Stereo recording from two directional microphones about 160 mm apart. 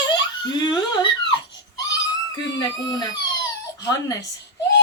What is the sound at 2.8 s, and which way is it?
Speech, 25° left (ahead or behind).